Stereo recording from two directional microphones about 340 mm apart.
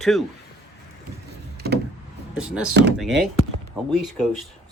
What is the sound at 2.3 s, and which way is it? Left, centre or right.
Speech, centre.